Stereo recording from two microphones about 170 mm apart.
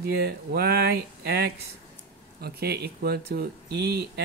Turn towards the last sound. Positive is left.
turn(degrees=-70)  # may be behind; listen again after turning